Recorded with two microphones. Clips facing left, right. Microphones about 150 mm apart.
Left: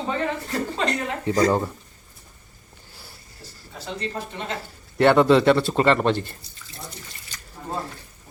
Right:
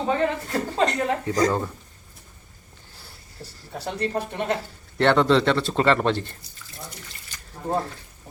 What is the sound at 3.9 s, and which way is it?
Speech, 60° right (ahead or behind).